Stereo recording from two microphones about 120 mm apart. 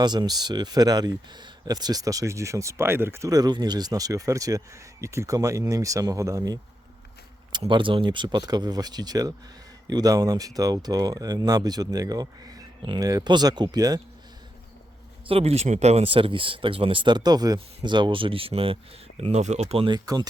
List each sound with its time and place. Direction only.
0.0 s speech: 35° right (ahead or behind)
7.7 s speech: 45° right (ahead or behind)
15.3 s speech: 55° right (ahead or behind)
19.2 s speech: 65° right (ahead or behind); by 20.0 s 45° right (ahead or behind)